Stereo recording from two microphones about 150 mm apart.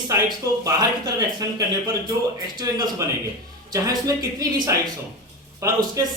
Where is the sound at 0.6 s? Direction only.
25° right (ahead or behind).